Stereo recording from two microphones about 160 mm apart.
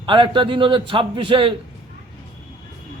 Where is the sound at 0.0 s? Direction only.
30° right (ahead or behind).